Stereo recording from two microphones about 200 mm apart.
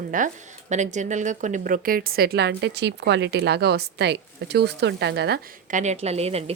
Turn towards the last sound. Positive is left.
turn(degrees=-30)  # may be behind; listen again after turning